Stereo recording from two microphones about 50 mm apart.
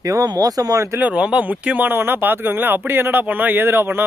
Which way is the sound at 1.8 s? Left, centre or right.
Right.